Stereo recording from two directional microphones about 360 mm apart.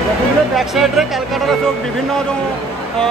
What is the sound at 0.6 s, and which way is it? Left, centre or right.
Speech, centre.